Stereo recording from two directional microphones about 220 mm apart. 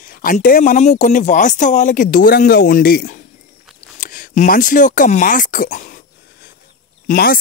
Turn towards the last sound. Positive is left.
turn(degrees=40)  # may be behind; listen again after turning